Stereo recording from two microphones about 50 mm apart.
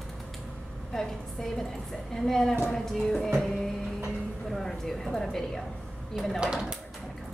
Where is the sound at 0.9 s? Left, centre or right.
Centre.